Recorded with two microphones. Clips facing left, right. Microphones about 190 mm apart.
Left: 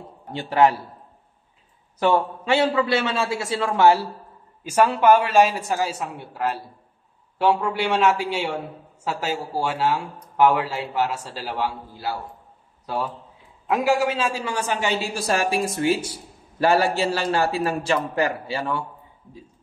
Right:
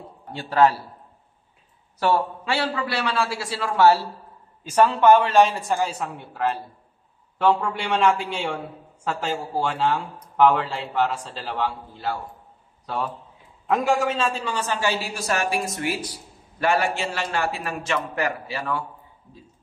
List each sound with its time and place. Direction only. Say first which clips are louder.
0.3 s a man's voice: left 1 dB; 20° left (ahead or behind)
2.0 s a man's voice: left 2 dB; 20° left (ahead or behind)
13.7 s a man's voice: left 1 dB; 5° left (ahead or behind); by 18.9 s 25° left (ahead or behind)